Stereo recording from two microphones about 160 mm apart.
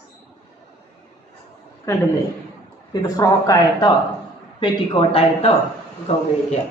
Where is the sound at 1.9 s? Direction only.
20° left (ahead or behind).